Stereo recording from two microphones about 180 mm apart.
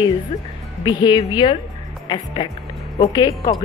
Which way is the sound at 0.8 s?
25° left (ahead or behind).